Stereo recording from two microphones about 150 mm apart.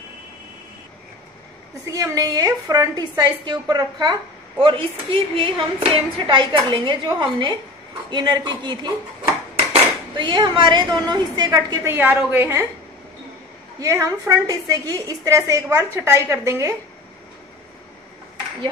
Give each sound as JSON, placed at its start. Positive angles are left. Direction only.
{"t": 1.9, "sound": "a woman's voice", "side_deg": -20}
{"t": 13.7, "sound": "a woman's voice", "side_deg": -20}